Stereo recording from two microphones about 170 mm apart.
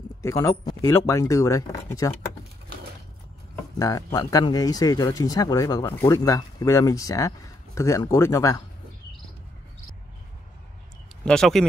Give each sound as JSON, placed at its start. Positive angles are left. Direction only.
{"t": 0.2, "sound": "speech", "side_deg": 15}
{"t": 3.7, "sound": "speech", "side_deg": 20}
{"t": 11.2, "sound": "speech", "side_deg": 0}